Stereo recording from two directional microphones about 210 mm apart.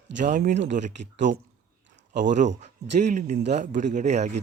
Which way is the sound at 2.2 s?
35° right (ahead or behind).